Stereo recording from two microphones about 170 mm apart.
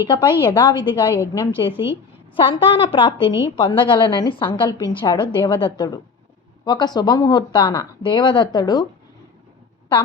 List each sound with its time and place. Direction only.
0.1 s a woman's voice: 30° left (ahead or behind)